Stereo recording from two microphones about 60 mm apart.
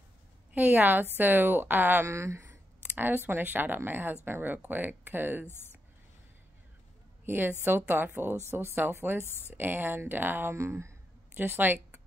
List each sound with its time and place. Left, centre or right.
0.5 s a woman's voice: right
2.0 s speech: right
2.4 s speech: right
7.2 s speech: right
10.5 s speech: right
11.3 s speech: right